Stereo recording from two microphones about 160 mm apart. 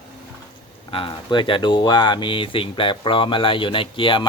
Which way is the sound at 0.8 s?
35° left (ahead or behind).